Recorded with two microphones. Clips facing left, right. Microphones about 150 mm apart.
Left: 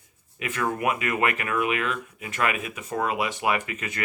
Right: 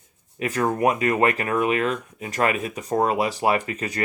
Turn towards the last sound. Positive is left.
turn(degrees=-35)  # may be behind; listen again after turning